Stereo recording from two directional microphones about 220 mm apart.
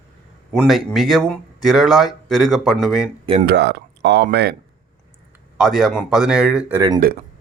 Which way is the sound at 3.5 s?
50° right (ahead or behind).